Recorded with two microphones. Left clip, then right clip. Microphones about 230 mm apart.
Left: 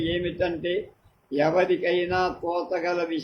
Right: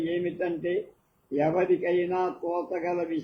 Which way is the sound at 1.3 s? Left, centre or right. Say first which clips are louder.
Left 3 dB; left.